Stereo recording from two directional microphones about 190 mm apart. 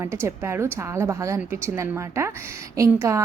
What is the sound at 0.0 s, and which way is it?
A woman's voice, 15° right (ahead or behind).